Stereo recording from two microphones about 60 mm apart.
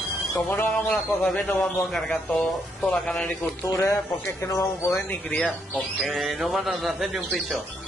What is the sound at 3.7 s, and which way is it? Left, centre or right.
Speech, left.